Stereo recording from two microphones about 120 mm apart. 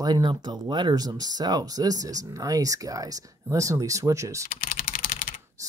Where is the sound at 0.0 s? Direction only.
40° right (ahead or behind).